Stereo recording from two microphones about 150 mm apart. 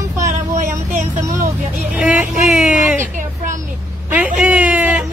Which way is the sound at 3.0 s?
60° right (ahead or behind).